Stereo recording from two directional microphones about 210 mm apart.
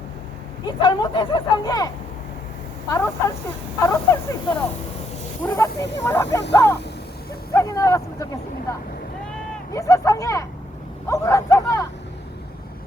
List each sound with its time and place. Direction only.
0.8 s speech: 20° left (ahead or behind)
2.9 s speech: 15° left (ahead or behind)
7.5 s vehicle: 15° left (ahead or behind)
9.7 s speech: 15° left (ahead or behind)